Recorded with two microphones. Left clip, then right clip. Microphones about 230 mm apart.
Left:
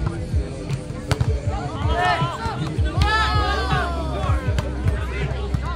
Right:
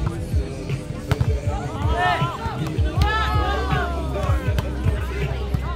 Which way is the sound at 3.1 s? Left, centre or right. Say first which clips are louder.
Left 3 dB; left.